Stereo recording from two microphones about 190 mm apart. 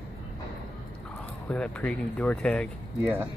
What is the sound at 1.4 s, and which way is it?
Speech, 5° left (ahead or behind).